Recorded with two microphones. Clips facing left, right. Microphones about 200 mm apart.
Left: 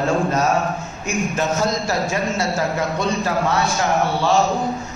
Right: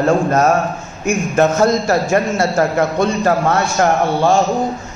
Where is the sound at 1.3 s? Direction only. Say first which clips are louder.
Right 10 dB; 55° right (ahead or behind).